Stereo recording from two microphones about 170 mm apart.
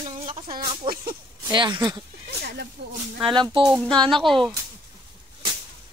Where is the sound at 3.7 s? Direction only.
Centre (ahead or behind).